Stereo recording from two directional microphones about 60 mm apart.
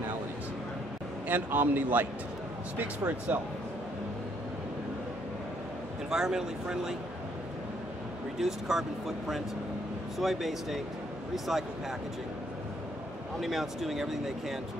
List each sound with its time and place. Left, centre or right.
1.2 s a man's voice: right
3.3 s speech: right
6.0 s speech: centre
8.4 s speech: centre
13.4 s speech: centre